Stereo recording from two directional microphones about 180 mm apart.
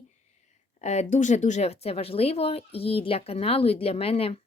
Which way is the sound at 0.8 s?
40° left (ahead or behind).